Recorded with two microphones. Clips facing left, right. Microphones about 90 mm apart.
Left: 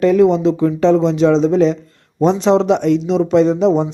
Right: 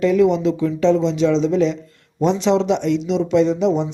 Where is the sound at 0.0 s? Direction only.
40° left (ahead or behind).